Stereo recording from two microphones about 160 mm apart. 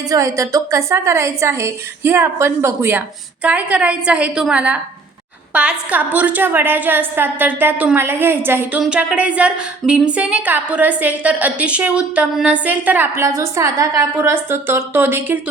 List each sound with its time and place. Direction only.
0.1 s a woman's voice: 20° right (ahead or behind)